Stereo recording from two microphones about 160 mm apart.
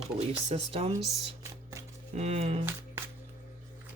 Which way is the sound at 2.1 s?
40° right (ahead or behind).